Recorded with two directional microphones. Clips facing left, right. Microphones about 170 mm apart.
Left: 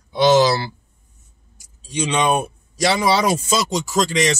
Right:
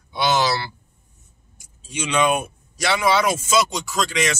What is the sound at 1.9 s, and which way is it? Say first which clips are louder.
Speech: left 1 dB; 35° left (ahead or behind).